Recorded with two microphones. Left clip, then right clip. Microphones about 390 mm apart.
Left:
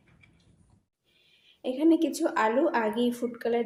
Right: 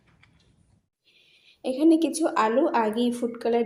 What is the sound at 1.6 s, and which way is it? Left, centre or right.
Speech, left.